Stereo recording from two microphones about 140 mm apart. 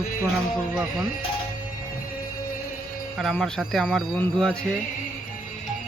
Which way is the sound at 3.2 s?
5° left (ahead or behind).